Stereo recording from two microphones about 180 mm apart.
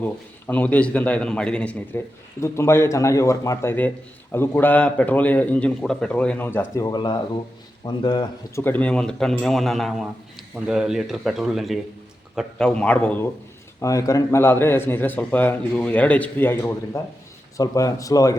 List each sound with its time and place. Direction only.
0.0 s a man's voice: 10° left (ahead or behind); by 8.6 s 25° left (ahead or behind)
8.6 s a man's voice: 10° left (ahead or behind)